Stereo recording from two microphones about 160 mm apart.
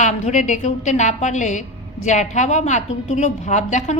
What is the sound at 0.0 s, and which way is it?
A woman's voice, 50° left (ahead or behind).